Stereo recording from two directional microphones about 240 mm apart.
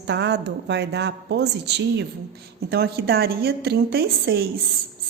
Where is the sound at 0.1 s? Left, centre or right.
Right.